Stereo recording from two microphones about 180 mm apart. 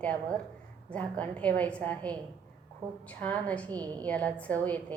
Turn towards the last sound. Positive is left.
turn(degrees=10)  # may be behind; listen again after turning